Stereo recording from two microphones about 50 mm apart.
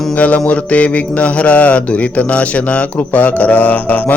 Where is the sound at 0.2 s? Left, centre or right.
Left.